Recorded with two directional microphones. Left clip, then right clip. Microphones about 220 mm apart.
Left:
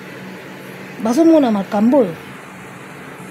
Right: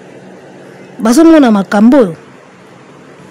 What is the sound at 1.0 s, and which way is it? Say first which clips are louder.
A woman's voice: right 7 dB; 50° right (ahead or behind).